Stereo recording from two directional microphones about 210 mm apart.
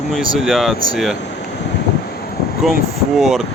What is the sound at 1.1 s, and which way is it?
Speech, 55° left (ahead or behind).